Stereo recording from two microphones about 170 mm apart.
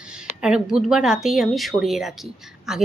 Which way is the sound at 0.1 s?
5° right (ahead or behind).